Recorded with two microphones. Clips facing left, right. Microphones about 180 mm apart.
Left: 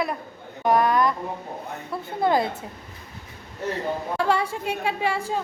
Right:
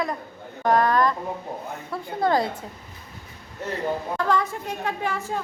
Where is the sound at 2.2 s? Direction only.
20° left (ahead or behind).